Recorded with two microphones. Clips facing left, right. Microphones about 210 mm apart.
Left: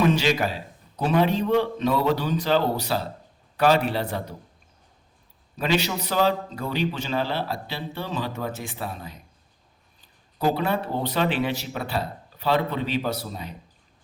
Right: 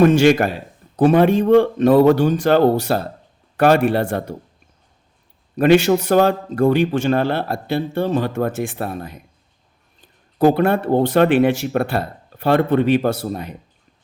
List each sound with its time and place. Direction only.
0.0 s a man's voice: 50° right (ahead or behind)
5.5 s a man's voice: 50° right (ahead or behind)
10.3 s a man's voice: 50° right (ahead or behind)